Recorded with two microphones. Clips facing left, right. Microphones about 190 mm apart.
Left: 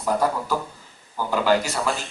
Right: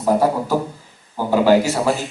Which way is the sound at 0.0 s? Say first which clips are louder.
Right 6 dB; 25° right (ahead or behind).